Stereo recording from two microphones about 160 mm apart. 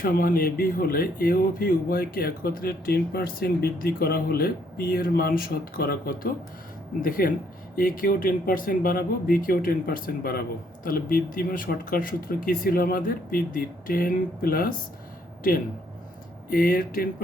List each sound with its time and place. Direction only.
0.0 s speech: 60° left (ahead or behind)
16.5 s speech: 65° left (ahead or behind)